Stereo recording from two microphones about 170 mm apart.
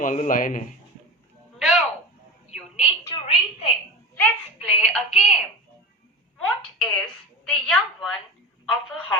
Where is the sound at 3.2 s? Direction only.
35° left (ahead or behind).